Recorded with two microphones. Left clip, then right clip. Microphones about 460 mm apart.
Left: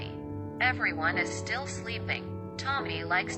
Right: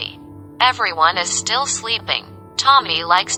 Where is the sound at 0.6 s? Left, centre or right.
Right.